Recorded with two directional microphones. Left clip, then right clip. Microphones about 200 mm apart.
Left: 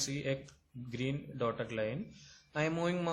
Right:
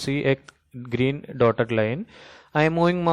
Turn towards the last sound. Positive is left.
turn(degrees=-35)  # may be behind; listen again after turning